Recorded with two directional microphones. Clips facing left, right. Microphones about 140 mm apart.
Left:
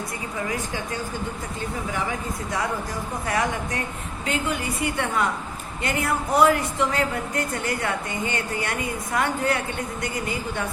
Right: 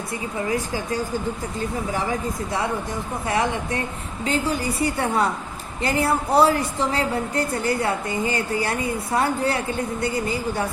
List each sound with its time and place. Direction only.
0.4 s a woman's voice: 35° right (ahead or behind)
3.2 s a woman's voice: 25° right (ahead or behind)